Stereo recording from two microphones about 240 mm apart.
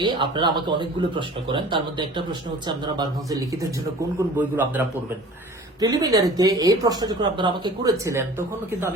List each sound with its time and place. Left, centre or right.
0.0 s speech: centre
4.4 s speech: centre